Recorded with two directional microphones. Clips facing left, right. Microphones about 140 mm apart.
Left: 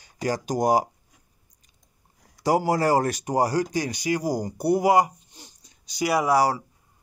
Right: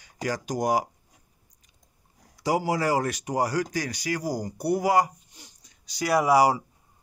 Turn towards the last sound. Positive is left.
turn(degrees=-10)  # may be behind; listen again after turning